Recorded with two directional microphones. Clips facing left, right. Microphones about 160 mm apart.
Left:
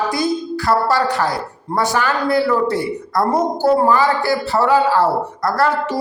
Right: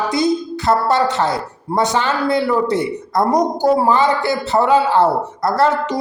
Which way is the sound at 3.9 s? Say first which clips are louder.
Even; 20° right (ahead or behind).